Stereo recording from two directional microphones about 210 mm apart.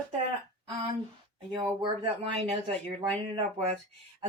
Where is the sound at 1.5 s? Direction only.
25° right (ahead or behind).